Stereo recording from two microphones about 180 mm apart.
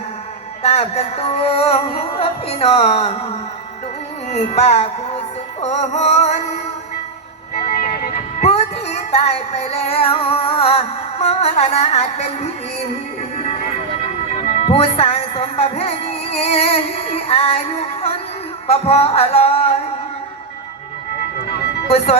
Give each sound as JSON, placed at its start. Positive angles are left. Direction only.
{"t": 0.6, "sound": "music", "side_deg": 35}
{"t": 4.3, "sound": "music", "side_deg": 35}
{"t": 7.7, "sound": "music", "side_deg": 55}
{"t": 8.4, "sound": "music", "side_deg": 35}
{"t": 14.0, "sound": "speech", "side_deg": 35}
{"t": 18.7, "sound": "music", "side_deg": 35}
{"t": 21.8, "sound": "speech", "side_deg": 35}